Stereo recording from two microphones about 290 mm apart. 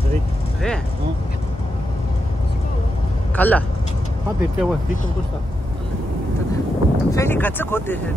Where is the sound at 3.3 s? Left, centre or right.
Centre.